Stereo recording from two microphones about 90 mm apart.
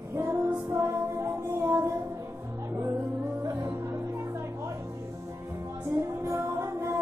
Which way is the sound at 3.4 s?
35° right (ahead or behind).